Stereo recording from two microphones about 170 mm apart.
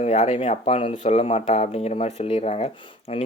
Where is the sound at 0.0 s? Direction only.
40° left (ahead or behind).